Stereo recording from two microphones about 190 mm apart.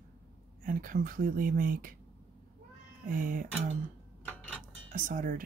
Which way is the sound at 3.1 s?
45° right (ahead or behind).